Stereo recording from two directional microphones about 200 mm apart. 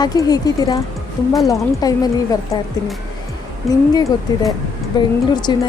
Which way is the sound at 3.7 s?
15° left (ahead or behind).